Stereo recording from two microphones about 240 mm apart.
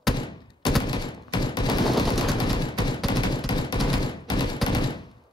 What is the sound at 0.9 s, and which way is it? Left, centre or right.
Fusillade, centre.